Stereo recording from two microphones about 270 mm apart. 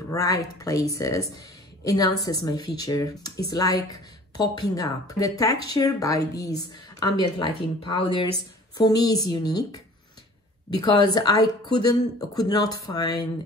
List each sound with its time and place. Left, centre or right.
0.1 s speech: centre
10.8 s speech: centre